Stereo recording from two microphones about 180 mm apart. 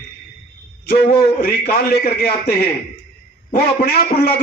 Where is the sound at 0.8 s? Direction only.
60° left (ahead or behind).